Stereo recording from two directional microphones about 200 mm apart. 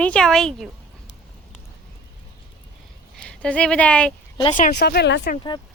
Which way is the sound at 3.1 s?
5° left (ahead or behind).